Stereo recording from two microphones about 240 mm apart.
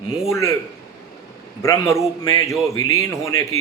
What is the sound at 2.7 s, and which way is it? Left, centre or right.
Speech, left.